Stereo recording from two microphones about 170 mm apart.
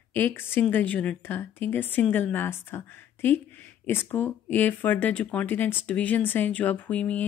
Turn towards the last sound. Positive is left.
turn(degrees=10)  # may be behind; listen again after turning